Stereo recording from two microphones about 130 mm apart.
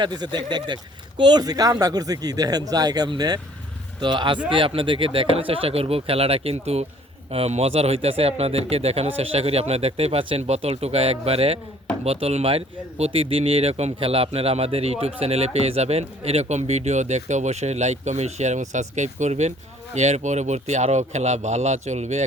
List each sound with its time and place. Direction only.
0.0 s speech: 35° right (ahead or behind); by 22.3 s 60° right (ahead or behind)